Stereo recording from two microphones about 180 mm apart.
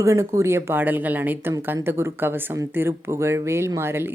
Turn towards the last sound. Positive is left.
turn(degrees=-15)  # may be behind; listen again after turning